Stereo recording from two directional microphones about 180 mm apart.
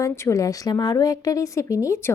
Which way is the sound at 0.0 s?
15° left (ahead or behind).